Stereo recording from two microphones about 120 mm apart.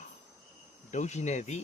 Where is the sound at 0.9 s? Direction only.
75° left (ahead or behind).